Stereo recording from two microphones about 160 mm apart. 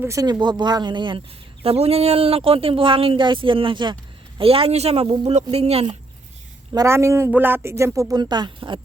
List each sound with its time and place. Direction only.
0.0 s speech: 20° right (ahead or behind); by 6.0 s 40° right (ahead or behind)
6.7 s speech: 15° right (ahead or behind)